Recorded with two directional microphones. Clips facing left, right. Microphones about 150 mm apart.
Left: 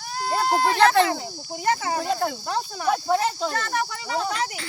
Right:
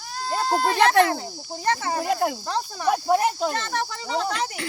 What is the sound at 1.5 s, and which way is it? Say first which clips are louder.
Speech: left 1 dB; 10° left (ahead or behind).